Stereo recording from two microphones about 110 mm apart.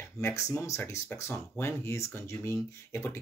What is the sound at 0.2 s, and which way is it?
Speech, 25° left (ahead or behind).